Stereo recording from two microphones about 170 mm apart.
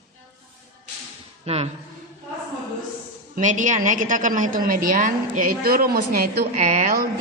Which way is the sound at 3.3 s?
50° right (ahead or behind).